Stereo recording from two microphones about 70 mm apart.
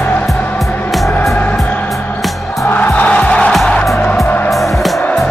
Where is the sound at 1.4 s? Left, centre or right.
Left.